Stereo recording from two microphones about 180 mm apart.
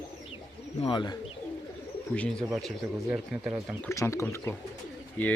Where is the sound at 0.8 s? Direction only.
25° left (ahead or behind).